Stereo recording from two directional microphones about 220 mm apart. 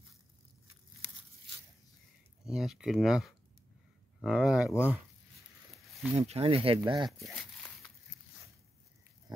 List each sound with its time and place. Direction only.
2.4 s speech: centre (ahead or behind)
6.1 s speech: 25° right (ahead or behind)
7.1 s speech: centre (ahead or behind)